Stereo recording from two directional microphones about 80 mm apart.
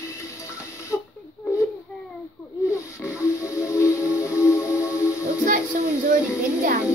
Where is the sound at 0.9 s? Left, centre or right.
Centre.